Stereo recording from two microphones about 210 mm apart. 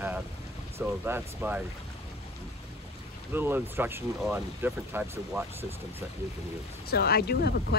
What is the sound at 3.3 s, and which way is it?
Speech, 10° right (ahead or behind).